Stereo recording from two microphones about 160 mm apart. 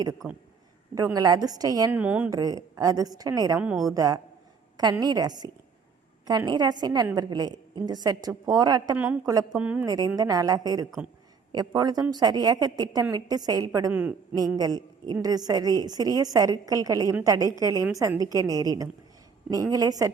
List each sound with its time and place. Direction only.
0.2 s a woman's voice: 10° right (ahead or behind)
0.9 s a woman's voice: 25° right (ahead or behind)
2.0 s a woman's voice: 10° right (ahead or behind)
2.3 s a woman's voice: 25° right (ahead or behind)
3.6 s a woman's voice: 5° right (ahead or behind)
3.9 s a woman's voice: 20° right (ahead or behind)
9.5 s a woman's voice: 10° right (ahead or behind)
9.8 s a woman's voice: 25° right (ahead or behind)